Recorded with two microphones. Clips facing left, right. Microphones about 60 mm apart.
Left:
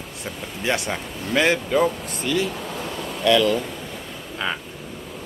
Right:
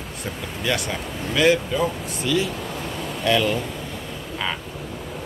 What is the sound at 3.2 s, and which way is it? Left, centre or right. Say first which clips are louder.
Speech: left 3 dB; left.